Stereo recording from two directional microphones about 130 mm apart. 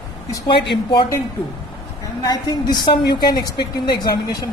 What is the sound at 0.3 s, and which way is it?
Speech, 40° left (ahead or behind).